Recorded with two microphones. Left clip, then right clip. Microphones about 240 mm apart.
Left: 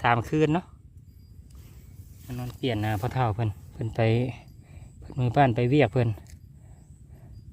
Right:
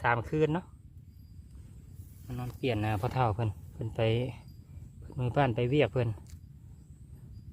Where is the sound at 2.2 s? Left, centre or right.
Left.